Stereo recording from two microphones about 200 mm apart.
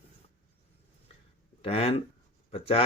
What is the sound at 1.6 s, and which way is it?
Speech, 30° left (ahead or behind).